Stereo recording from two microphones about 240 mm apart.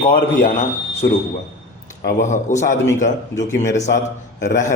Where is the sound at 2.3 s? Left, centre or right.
Left.